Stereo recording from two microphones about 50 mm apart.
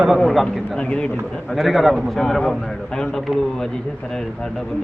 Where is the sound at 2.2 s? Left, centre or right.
Centre.